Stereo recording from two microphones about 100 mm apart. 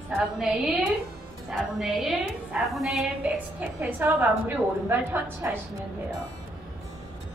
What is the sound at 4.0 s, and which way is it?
A woman's voice, 20° right (ahead or behind).